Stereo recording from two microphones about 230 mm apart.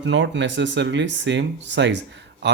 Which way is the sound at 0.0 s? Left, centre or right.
Right.